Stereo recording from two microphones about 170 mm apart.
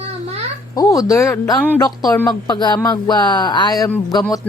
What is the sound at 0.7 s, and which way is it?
Speech, 20° left (ahead or behind).